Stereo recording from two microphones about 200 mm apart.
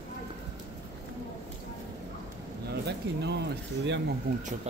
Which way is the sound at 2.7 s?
55° right (ahead or behind).